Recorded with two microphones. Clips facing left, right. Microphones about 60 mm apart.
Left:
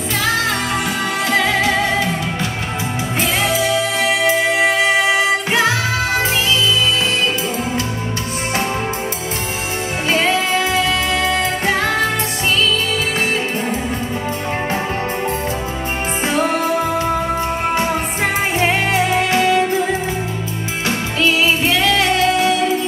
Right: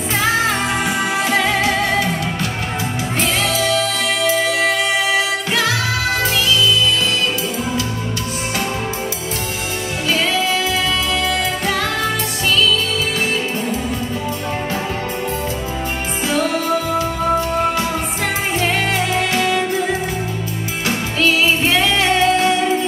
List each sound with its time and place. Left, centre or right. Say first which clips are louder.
1.3 s music: left 3 dB; centre
3.4 s music: left 1 dB; centre
10.1 s music: left 2 dB; left
16.3 s music: left 1 dB; left
18.6 s music: left 3 dB; centre
21.6 s music: even; centre